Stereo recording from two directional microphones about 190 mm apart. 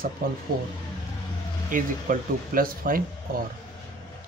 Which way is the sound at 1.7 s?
50° right (ahead or behind).